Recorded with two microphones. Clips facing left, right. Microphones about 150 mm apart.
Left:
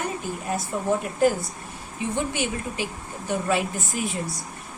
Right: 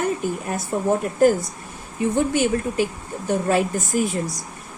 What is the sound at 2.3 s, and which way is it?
A woman's voice, 45° right (ahead or behind).